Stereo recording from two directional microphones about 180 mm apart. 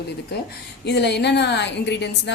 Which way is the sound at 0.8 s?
70° left (ahead or behind).